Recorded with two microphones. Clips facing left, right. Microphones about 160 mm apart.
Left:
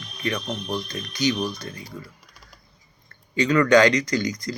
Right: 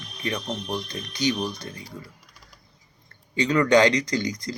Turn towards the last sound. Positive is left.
turn(degrees=-25)  # may be behind; listen again after turning